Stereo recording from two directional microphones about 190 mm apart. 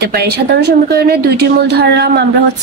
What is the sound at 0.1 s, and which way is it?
A woman's voice, 60° right (ahead or behind).